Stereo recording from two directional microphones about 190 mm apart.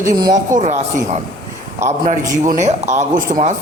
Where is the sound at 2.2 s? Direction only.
20° right (ahead or behind).